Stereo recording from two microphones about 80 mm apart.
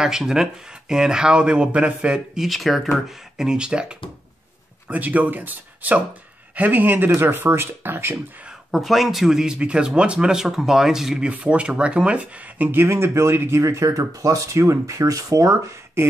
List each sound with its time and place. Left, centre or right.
0.0 s speech: centre; by 8.2 s right
8.7 s speech: centre; by 13.7 s right
13.7 s speech: right